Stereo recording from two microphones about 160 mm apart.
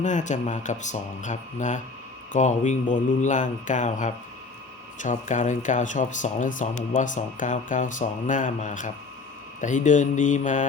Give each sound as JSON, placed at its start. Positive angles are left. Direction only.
{"t": 0.0, "sound": "speech", "side_deg": 50}